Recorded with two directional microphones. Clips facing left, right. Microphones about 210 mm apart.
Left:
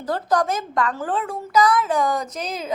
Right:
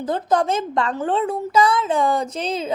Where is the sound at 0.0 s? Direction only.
20° right (ahead or behind).